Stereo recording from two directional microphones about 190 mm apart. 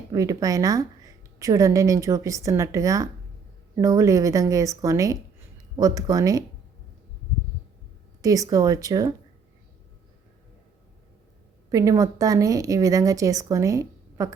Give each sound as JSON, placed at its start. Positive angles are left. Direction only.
{"t": 0.1, "sound": "a woman's voice", "side_deg": -20}
{"t": 8.2, "sound": "a woman's voice", "side_deg": -20}
{"t": 11.7, "sound": "a woman's voice", "side_deg": -15}